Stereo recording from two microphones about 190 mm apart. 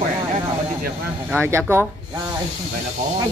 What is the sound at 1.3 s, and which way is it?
Speech, 10° right (ahead or behind).